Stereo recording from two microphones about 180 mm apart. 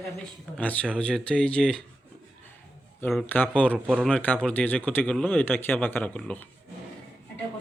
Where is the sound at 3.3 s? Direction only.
10° left (ahead or behind).